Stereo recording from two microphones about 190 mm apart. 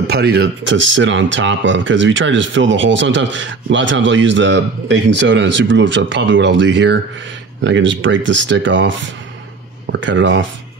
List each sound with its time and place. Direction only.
0.0 s speech: 60° right (ahead or behind); by 10.4 s 75° right (ahead or behind)